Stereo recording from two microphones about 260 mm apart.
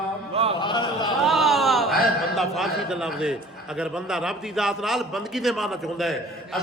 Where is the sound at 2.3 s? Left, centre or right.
Centre.